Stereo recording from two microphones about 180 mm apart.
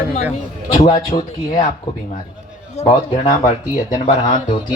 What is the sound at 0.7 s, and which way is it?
Speech, 25° left (ahead or behind).